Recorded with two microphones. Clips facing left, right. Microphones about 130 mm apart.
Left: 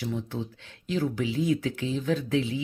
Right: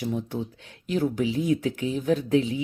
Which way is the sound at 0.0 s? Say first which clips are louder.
Right 3 dB; 15° right (ahead or behind).